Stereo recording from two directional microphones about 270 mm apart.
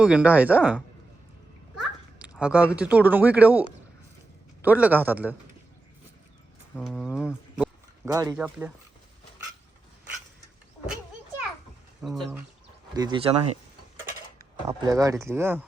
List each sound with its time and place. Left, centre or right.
0.0 s speech: centre
4.6 s speech: centre
6.7 s a sound: centre
8.4 s speech: centre
12.0 s speech: centre
12.9 s speech: centre
14.7 s speech: centre